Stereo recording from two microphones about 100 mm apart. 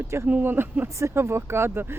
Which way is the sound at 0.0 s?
25° right (ahead or behind).